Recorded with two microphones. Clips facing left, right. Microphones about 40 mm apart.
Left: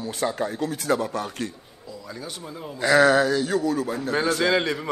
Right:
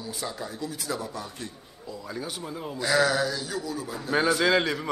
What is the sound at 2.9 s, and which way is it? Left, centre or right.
Speech, left.